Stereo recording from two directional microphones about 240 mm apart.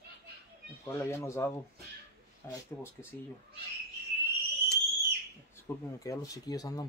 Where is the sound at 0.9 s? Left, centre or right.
Centre.